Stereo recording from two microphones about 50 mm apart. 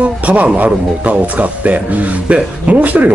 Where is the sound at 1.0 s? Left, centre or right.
Right.